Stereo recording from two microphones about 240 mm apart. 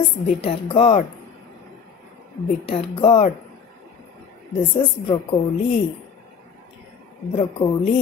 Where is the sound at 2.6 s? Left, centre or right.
Left.